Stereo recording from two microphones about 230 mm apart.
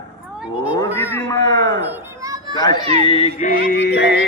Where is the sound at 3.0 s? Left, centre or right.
Left.